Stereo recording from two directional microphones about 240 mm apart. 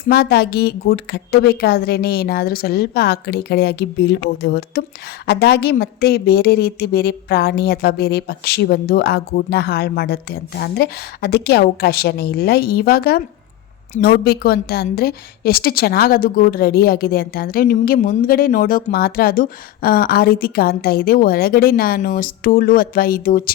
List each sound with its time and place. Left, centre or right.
0.1 s a woman's voice: left